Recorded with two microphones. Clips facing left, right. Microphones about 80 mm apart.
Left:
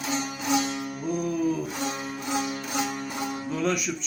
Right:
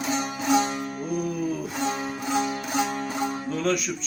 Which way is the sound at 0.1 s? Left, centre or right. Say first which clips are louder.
Right 3 dB; right.